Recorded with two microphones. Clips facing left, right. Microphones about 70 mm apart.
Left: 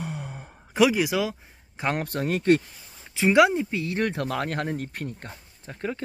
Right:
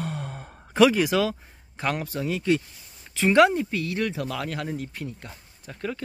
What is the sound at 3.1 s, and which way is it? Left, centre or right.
Speech, centre.